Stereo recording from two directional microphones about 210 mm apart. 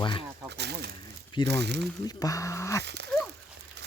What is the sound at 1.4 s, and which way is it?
Speech, 55° right (ahead or behind).